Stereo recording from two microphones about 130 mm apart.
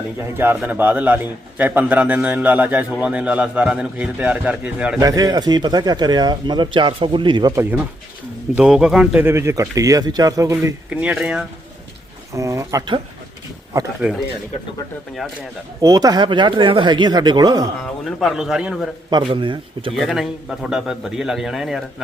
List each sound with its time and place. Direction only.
0.2 s a man's voice: 15° right (ahead or behind)
4.9 s speech: 30° right (ahead or behind)
7.5 s a man's voice: 15° right (ahead or behind)
8.5 s a man's voice: 5° right (ahead or behind)
9.2 s speech: 20° right (ahead or behind)
10.8 s a man's voice: 10° right (ahead or behind)
12.3 s speech: 25° right (ahead or behind)
14.0 s a man's voice: 5° right (ahead or behind)
15.8 s speech: 25° right (ahead or behind)
17.8 s a man's voice: centre (ahead or behind)
19.1 s speech: 40° right (ahead or behind)
20.0 s a man's voice: centre (ahead or behind)